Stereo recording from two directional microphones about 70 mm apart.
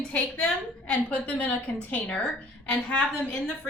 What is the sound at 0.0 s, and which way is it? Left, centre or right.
A woman's voice, centre.